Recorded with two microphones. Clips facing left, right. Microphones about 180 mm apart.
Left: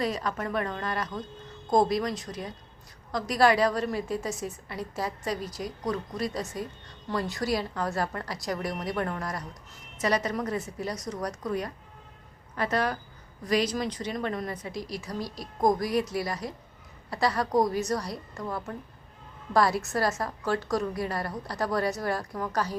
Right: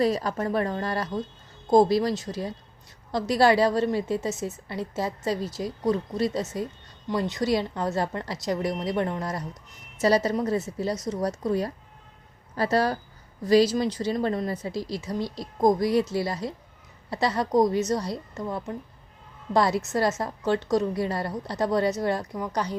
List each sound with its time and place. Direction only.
0.0 s a woman's voice: 35° right (ahead or behind); by 22.7 s 20° right (ahead or behind)